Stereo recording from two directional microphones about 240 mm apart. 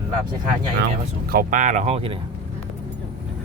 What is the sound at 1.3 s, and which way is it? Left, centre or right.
Speech, right.